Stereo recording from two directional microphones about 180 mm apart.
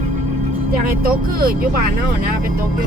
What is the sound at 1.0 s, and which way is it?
Speech, 55° right (ahead or behind).